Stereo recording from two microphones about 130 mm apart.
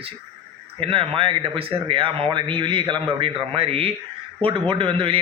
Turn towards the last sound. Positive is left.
turn(degrees=-45)  # may be behind; listen again after turning